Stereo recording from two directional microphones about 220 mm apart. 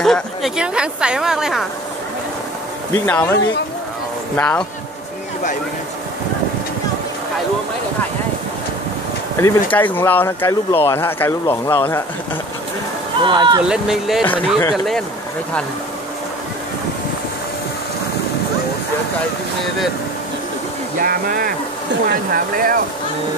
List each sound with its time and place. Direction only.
0.0 s a woman's voice: centre (ahead or behind)
2.9 s speech: 10° left (ahead or behind)
4.4 s speech: 10° left (ahead or behind)
9.4 s speech: 10° left (ahead or behind)
13.2 s speech: 20° right (ahead or behind)
13.7 s a woman's voice: centre (ahead or behind)
21.0 s speech: 40° right (ahead or behind)